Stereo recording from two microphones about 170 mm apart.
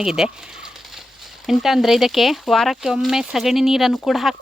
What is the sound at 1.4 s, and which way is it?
Speech, centre (ahead or behind).